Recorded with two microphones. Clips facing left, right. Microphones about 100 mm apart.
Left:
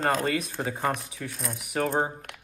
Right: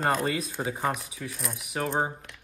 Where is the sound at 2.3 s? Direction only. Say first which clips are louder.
Left 5 dB; 65° left (ahead or behind).